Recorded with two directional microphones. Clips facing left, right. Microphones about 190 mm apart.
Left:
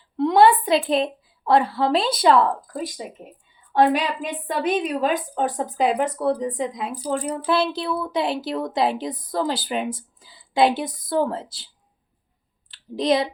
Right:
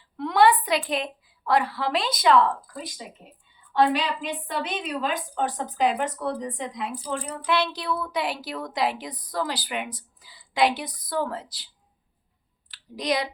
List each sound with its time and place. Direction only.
0.2 s a sound: 25° left (ahead or behind)
0.9 s a woman's voice: 25° left (ahead or behind)
12.7 s speech: 25° left (ahead or behind)